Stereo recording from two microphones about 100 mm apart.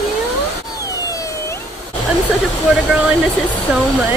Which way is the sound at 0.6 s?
35° left (ahead or behind).